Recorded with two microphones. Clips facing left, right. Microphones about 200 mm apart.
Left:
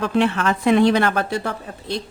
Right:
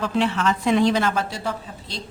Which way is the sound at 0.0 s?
55° left (ahead or behind).